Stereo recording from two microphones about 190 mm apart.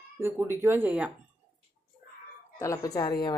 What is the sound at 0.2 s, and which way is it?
Speech, 10° right (ahead or behind).